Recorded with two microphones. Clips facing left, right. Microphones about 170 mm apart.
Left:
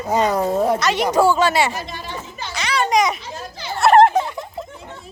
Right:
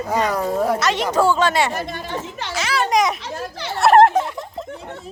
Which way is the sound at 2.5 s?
Centre (ahead or behind).